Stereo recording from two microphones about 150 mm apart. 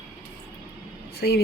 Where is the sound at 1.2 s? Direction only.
90° left.